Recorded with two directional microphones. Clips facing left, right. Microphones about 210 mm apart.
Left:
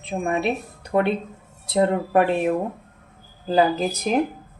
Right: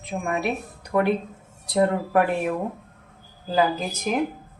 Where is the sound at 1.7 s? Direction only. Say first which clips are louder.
Left 1 dB; 25° left (ahead or behind).